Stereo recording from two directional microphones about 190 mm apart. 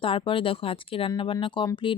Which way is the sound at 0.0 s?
25° left (ahead or behind).